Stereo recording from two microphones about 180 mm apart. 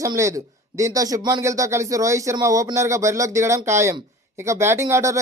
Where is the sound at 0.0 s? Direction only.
15° right (ahead or behind).